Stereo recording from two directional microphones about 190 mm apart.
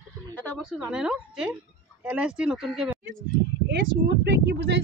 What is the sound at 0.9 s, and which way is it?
Speech, 5° right (ahead or behind).